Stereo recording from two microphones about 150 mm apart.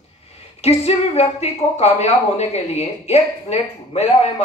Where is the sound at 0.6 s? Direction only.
45° left (ahead or behind).